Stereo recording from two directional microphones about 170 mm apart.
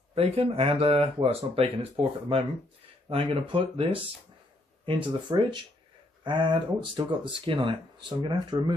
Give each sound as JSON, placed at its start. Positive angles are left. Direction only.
{"t": 0.1, "sound": "speech", "side_deg": -35}